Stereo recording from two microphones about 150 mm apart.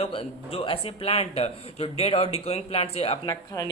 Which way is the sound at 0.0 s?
40° left (ahead or behind).